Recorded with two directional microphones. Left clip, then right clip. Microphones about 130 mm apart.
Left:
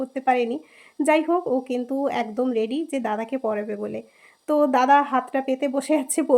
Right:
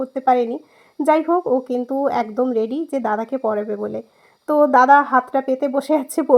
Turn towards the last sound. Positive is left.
turn(degrees=-40)  # may be behind; listen again after turning